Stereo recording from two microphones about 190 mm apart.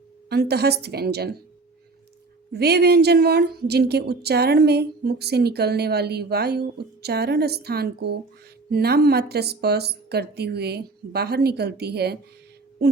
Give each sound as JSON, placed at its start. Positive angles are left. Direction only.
{"t": 0.3, "sound": "a woman's voice", "side_deg": -55}
{"t": 2.5, "sound": "a woman's voice", "side_deg": -60}